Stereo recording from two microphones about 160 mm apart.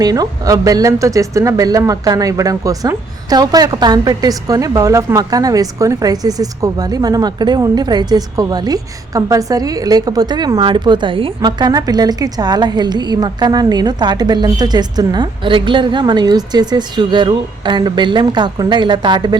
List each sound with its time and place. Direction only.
0.0 s speech: 25° right (ahead or behind)